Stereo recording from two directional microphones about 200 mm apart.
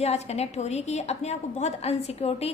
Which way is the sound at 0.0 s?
30° left (ahead or behind).